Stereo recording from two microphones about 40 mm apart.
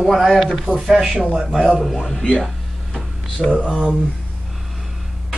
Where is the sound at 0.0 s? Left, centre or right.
Centre.